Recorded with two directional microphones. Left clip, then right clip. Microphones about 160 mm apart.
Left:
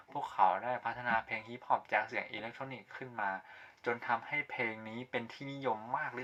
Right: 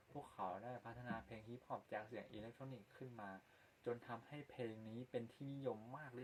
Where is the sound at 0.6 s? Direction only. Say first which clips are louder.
Left 17 dB; 35° left (ahead or behind).